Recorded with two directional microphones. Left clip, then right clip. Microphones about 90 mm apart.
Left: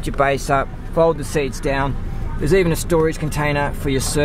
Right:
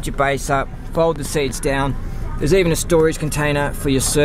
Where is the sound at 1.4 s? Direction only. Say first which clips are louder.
Right 1 dB; 20° right (ahead or behind).